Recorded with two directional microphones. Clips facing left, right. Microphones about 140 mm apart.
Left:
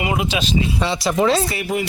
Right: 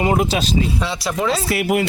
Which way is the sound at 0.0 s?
40° right (ahead or behind).